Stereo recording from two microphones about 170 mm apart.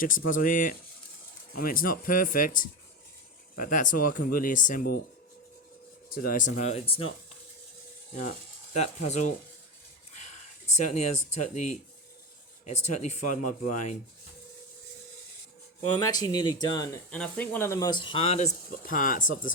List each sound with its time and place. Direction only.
0.0 s speech: 50° left (ahead or behind)
6.2 s speech: 50° left (ahead or behind); by 7.1 s 35° left (ahead or behind)
8.7 s speech: 45° left (ahead or behind)
10.1 s a sound: 45° left (ahead or behind)
10.8 s speech: 45° left (ahead or behind)
16.0 s speech: 25° left (ahead or behind)
17.1 s speech: 10° left (ahead or behind); by 19.5 s 50° left (ahead or behind)